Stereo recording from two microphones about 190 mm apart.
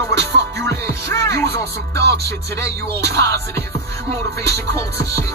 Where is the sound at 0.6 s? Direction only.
15° left (ahead or behind).